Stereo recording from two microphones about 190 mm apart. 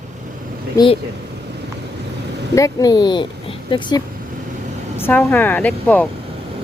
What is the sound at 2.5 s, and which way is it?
Speech, 20° left (ahead or behind).